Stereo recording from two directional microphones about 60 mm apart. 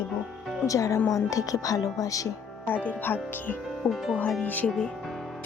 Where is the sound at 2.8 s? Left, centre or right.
Left.